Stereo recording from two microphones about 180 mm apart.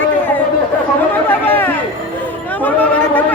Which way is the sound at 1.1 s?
10° left (ahead or behind).